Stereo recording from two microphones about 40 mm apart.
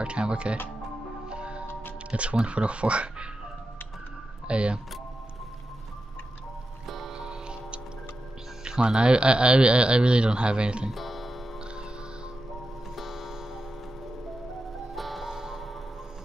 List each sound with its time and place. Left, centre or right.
0.0 s speech: right
1.3 s music: right
1.7 s music: left
2.0 s speech: right
4.5 s speech: right
7.1 s music: right
8.6 s speech: right
10.9 s music: centre
12.9 s tick-tock: centre
15.0 s music: centre
15.3 s a sound: centre